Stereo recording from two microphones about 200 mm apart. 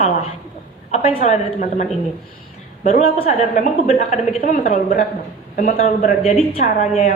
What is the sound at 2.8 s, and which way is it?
A woman's voice, 35° left (ahead or behind).